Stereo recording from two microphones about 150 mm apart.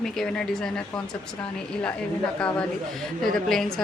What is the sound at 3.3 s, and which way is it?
Speech, 5° left (ahead or behind).